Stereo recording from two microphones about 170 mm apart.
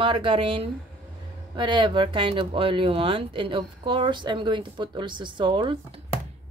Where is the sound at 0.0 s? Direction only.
30° right (ahead or behind).